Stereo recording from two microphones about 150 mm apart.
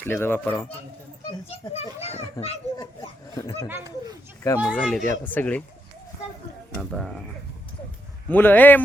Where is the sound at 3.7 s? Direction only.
20° right (ahead or behind).